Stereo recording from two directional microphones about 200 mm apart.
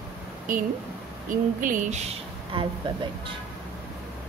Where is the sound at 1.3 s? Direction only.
40° right (ahead or behind).